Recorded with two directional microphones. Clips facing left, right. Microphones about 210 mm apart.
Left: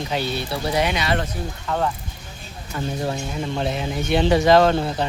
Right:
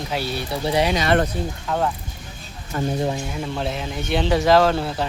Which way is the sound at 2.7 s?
45° right (ahead or behind).